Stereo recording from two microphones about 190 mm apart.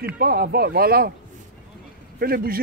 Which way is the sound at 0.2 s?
55° right (ahead or behind).